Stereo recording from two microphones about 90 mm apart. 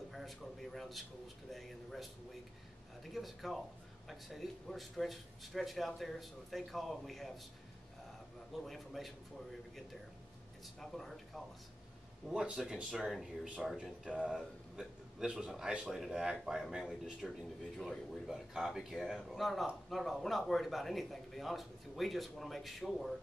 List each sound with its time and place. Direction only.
0.1 s a man's voice: centre (ahead or behind)
8.5 s speech: centre (ahead or behind)
10.8 s speech: 5° left (ahead or behind)
14.8 s a man's voice: 5° right (ahead or behind)